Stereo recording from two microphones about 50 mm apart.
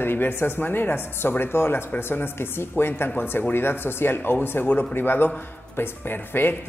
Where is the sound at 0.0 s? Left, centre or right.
Left.